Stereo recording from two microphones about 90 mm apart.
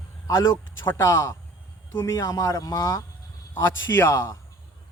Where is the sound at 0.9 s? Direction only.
35° left (ahead or behind).